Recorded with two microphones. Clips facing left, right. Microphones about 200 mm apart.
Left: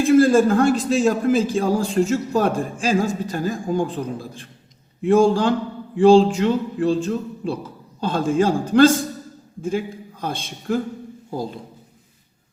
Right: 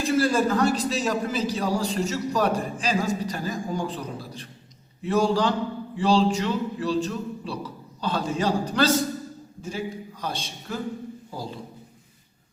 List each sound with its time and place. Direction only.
0.0 s a man's voice: 50° left (ahead or behind)